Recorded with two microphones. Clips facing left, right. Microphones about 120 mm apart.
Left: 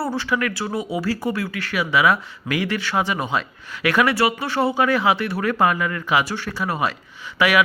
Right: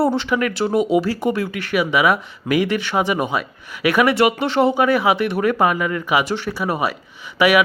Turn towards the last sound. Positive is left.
turn(degrees=-15)  # may be behind; listen again after turning